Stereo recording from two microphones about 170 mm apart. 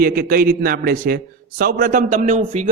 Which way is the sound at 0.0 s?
60° right (ahead or behind).